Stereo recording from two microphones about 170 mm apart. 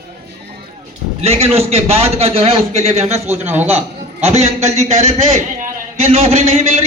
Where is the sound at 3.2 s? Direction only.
10° right (ahead or behind).